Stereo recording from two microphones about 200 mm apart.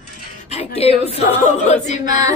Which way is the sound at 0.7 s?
30° left (ahead or behind).